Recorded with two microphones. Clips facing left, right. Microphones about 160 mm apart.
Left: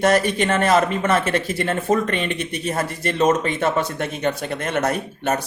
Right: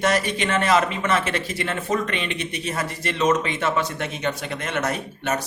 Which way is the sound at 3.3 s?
40° left (ahead or behind).